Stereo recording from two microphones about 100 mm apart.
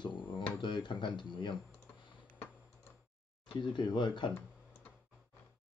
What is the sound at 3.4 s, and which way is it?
Speech, 55° left (ahead or behind).